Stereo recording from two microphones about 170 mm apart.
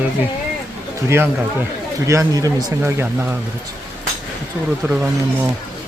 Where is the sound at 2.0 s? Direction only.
20° right (ahead or behind).